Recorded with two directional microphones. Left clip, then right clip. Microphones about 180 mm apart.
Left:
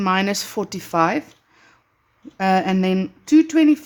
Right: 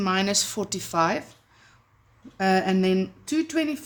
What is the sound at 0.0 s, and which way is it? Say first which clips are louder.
Speech: left 4 dB; 50° left (ahead or behind).